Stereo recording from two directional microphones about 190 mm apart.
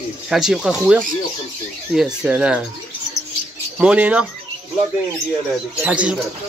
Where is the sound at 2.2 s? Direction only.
5° right (ahead or behind).